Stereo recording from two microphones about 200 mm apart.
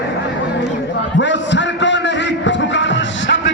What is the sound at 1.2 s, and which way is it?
Music, 65° left (ahead or behind).